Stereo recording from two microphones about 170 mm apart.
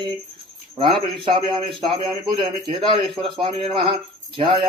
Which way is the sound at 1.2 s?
25° right (ahead or behind).